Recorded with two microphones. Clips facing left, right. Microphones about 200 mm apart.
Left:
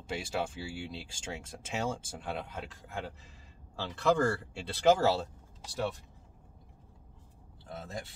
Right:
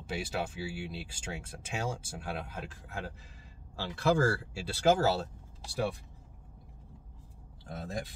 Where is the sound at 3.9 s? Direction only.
10° right (ahead or behind).